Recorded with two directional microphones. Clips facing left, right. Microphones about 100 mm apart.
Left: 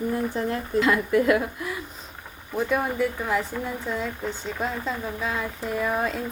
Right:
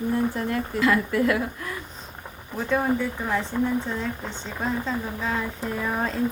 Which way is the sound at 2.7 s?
10° left (ahead or behind).